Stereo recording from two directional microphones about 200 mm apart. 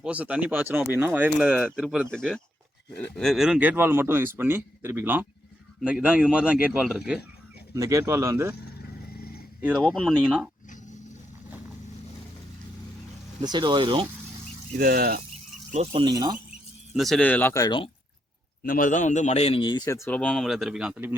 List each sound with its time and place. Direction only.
0.0 s speech: 5° right (ahead or behind)
7.8 s speech: 15° right (ahead or behind)
9.1 s dog: 50° left (ahead or behind)
9.6 s speech: 5° right (ahead or behind)
13.4 s speech: 20° right (ahead or behind)
14.8 s speech: 50° right (ahead or behind)
15.7 s speech: 35° right (ahead or behind)
16.9 s a man's voice: centre (ahead or behind); by 17.8 s 20° left (ahead or behind)
18.6 s a man's voice: 45° left (ahead or behind); by 21.2 s 10° right (ahead or behind)